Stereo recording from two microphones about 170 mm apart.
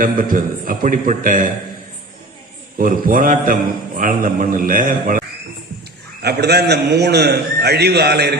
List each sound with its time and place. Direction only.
0.0 s a man's voice: 55° right (ahead or behind)
2.7 s a man's voice: 55° right (ahead or behind)
6.2 s a man's voice: 75° right (ahead or behind)